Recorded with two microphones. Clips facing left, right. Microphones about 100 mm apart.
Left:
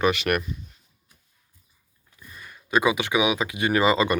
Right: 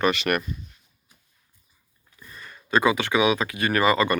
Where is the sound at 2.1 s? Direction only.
5° left (ahead or behind).